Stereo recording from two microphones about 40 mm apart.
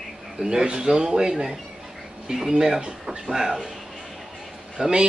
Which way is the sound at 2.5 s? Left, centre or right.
Centre.